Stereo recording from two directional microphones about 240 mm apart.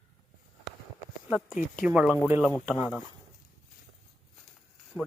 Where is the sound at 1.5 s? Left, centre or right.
Left.